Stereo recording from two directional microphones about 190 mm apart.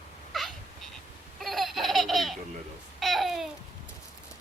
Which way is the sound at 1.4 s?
Centre (ahead or behind).